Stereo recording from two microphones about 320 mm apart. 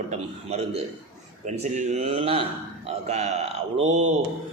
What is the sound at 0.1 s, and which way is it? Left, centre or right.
A man's voice, centre.